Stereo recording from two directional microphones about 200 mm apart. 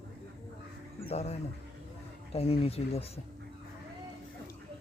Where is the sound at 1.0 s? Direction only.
35° left (ahead or behind).